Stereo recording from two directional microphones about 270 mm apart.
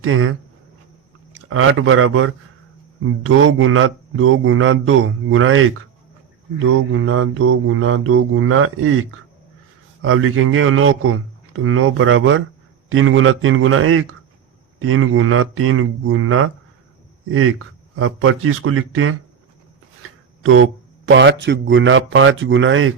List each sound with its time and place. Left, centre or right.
0.0 s speech: right
1.5 s speech: right
6.7 s speech: right
10.0 s speech: right
17.9 s speech: right
20.0 s a sound: right
21.1 s speech: right